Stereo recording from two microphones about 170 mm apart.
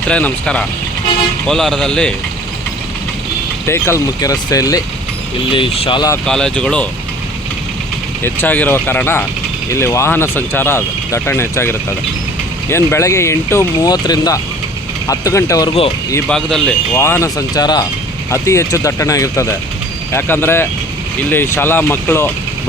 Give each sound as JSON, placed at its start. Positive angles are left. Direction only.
{"t": 0.1, "sound": "speech", "side_deg": 5}
{"t": 3.7, "sound": "speech", "side_deg": 15}
{"t": 5.5, "sound": "speech", "side_deg": 30}
{"t": 6.2, "sound": "speech", "side_deg": 5}
{"t": 8.2, "sound": "speech", "side_deg": 10}
{"t": 16.3, "sound": "speech", "side_deg": 5}
{"t": 16.9, "sound": "speech", "side_deg": 15}